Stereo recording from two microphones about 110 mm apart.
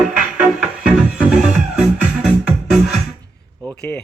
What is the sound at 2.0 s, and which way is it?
Music, 10° right (ahead or behind).